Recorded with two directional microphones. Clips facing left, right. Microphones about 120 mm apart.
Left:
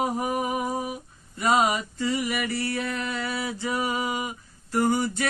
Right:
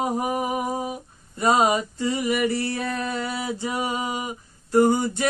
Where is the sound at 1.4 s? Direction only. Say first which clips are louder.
Right 3 dB; 30° right (ahead or behind).